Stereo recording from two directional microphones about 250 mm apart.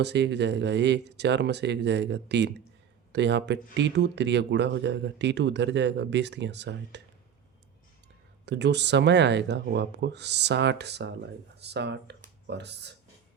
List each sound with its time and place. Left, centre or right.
0.0 s speech: right
8.4 s speech: right